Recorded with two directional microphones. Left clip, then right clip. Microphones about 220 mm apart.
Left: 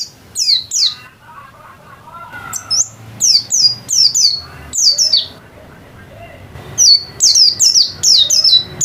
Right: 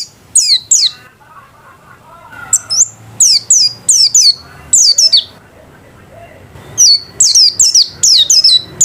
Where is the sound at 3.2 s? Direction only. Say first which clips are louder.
Right 2 dB; 25° right (ahead or behind).